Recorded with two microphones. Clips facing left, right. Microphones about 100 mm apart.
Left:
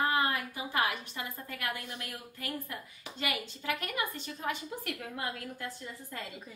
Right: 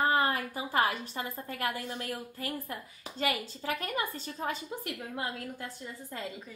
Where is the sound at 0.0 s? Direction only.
35° right (ahead or behind).